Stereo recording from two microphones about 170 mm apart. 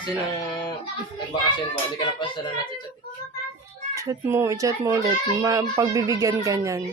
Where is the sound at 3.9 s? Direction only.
20° right (ahead or behind).